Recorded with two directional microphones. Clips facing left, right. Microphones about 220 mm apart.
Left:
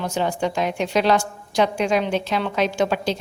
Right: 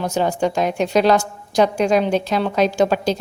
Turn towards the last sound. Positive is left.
turn(degrees=-40)  # may be behind; listen again after turning